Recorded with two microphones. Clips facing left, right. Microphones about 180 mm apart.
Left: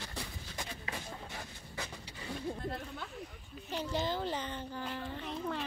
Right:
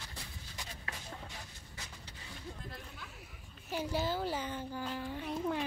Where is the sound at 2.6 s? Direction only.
60° left (ahead or behind).